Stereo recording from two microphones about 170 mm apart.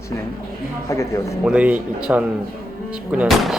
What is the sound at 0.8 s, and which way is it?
Speech, 20° left (ahead or behind).